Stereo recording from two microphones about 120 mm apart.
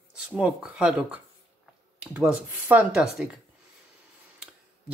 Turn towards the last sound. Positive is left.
turn(degrees=-5)  # may be behind; listen again after turning